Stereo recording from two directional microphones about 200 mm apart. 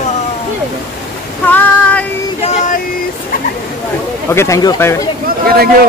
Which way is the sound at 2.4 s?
40° left (ahead or behind).